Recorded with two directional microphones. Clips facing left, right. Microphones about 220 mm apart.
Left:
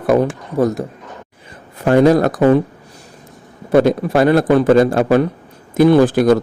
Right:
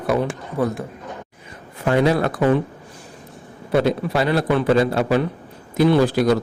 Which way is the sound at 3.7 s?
50° left (ahead or behind).